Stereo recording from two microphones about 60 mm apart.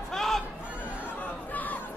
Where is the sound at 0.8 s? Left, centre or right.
Right.